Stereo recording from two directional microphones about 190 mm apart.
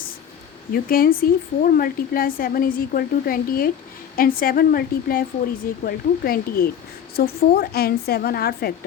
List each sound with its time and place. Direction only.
0.7 s a woman's voice: 50° left (ahead or behind)